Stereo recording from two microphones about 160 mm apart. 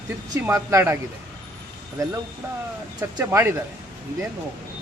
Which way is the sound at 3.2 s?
15° right (ahead or behind).